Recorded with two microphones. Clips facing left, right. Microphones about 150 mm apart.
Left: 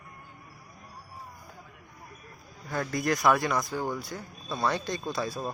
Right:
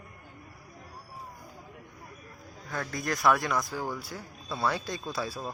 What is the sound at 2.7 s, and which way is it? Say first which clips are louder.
Speech: left 5 dB; centre (ahead or behind).